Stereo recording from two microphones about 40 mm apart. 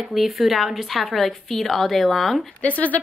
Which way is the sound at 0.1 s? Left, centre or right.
Centre.